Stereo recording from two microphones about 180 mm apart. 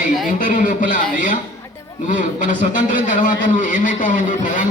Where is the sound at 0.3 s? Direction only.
45° left (ahead or behind).